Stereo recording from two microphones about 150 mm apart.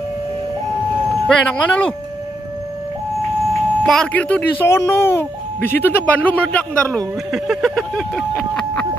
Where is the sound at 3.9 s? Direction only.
5° left (ahead or behind).